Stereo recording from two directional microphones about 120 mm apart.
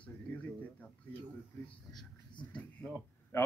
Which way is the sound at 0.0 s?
15° left (ahead or behind).